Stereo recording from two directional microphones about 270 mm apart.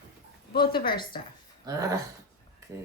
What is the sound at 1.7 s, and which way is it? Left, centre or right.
Speech, centre.